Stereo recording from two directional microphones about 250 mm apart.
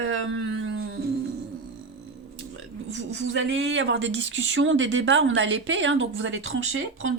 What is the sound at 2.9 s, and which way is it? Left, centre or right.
A woman's voice, right.